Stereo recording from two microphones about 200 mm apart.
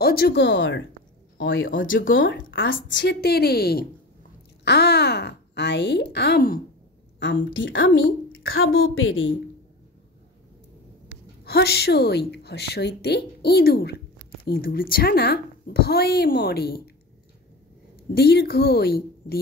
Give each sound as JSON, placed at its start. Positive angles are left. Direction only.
{"t": 0.0, "sound": "a woman's voice", "side_deg": 50}
{"t": 1.7, "sound": "a woman's voice", "side_deg": 45}
{"t": 2.1, "sound": "speech", "side_deg": 70}
{"t": 7.2, "sound": "a woman's voice", "side_deg": 65}
{"t": 11.4, "sound": "a woman's voice", "side_deg": 55}
{"t": 18.1, "sound": "a woman's voice", "side_deg": 55}